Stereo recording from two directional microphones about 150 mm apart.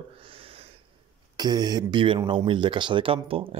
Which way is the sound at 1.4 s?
25° right (ahead or behind).